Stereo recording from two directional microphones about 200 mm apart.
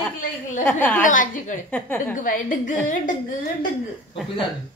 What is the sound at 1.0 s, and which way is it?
Speech, 40° left (ahead or behind).